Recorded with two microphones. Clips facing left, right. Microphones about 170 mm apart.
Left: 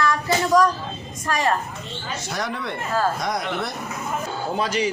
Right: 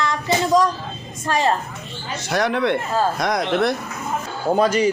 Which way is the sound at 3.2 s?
90° right.